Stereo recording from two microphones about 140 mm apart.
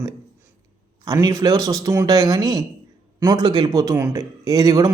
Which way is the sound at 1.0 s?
25° right (ahead or behind).